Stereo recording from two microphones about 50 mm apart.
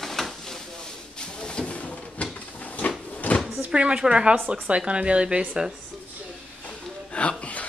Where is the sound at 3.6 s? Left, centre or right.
Right.